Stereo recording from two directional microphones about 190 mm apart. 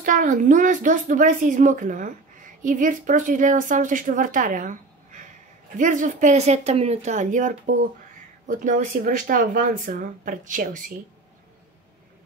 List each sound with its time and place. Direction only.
0.0 s a woman's voice: 45° right (ahead or behind)